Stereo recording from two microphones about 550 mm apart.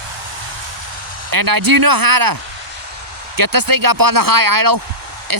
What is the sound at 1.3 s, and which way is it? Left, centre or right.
Speech, right.